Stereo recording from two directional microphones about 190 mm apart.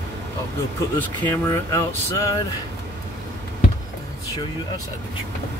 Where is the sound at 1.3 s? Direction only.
15° left (ahead or behind).